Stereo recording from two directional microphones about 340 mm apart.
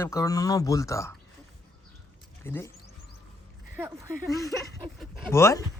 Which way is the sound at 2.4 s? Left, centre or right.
Centre.